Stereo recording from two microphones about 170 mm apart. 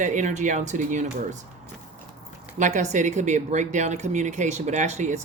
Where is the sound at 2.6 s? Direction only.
45° right (ahead or behind).